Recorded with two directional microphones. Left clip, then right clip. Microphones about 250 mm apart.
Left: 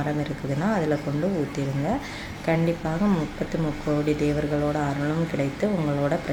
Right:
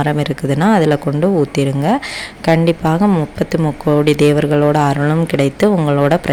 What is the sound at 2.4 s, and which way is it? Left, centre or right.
Speech, right.